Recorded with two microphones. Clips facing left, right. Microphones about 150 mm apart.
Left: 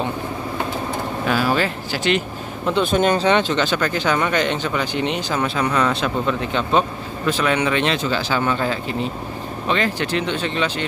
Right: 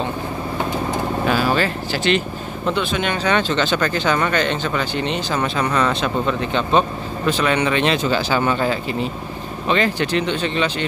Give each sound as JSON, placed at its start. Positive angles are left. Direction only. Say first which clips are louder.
{"t": 1.5, "sound": "speech", "louder": "right 1 dB", "side_deg": 10}
{"t": 2.8, "sound": "speech", "louder": "left 5 dB", "side_deg": 45}
{"t": 3.3, "sound": "speech", "louder": "left 2 dB", "side_deg": 20}
{"t": 3.5, "sound": "speech", "louder": "right 1 dB", "side_deg": 5}